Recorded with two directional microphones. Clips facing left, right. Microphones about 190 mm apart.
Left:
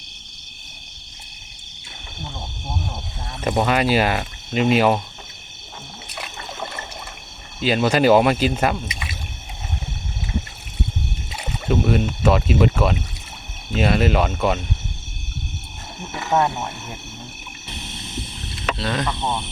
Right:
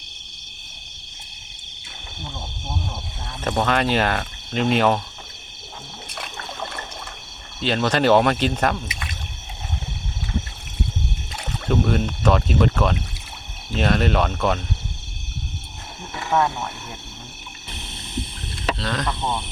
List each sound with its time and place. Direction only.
3.4 s speech: 10° left (ahead or behind)
6.1 s rowboat: 5° left (ahead or behind)
7.6 s speech: 10° left (ahead or behind)
11.3 s speech: 5° left (ahead or behind)
16.3 s speech: 20° left (ahead or behind)
18.8 s speech: 10° left (ahead or behind)